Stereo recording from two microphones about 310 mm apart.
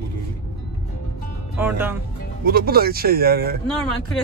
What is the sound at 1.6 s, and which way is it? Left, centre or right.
Speech, centre.